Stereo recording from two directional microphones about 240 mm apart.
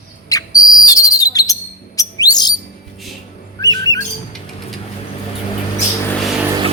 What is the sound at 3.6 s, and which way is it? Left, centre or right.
Squawk, centre.